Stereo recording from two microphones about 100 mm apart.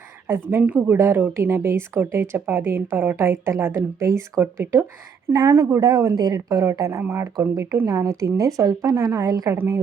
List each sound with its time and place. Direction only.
0.3 s speech: 20° right (ahead or behind)
5.8 s a woman's voice: 40° right (ahead or behind)